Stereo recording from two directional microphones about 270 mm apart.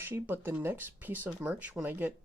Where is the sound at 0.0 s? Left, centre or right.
Centre.